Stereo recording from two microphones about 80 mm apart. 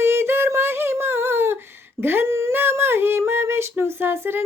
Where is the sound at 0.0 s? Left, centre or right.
Right.